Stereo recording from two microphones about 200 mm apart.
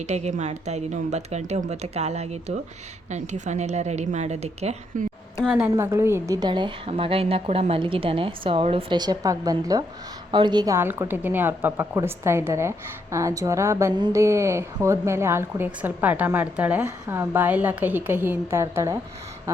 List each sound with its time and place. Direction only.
0.0 s a woman's voice: 35° right (ahead or behind)
5.4 s a woman's voice: 5° right (ahead or behind)